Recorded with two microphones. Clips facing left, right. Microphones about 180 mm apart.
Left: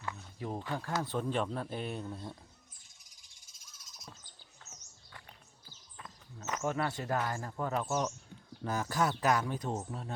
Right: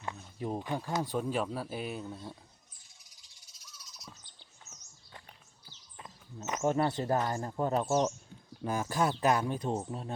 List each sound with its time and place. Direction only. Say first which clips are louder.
0.0 s speech: right 3 dB; 20° right (ahead or behind); by 2.3 s 5° right (ahead or behind)
3.0 s bird: right 2 dB; 50° left (ahead or behind)
6.0 s speech: right 4 dB; 20° right (ahead or behind)
8.6 s speech: right 2 dB; 15° right (ahead or behind)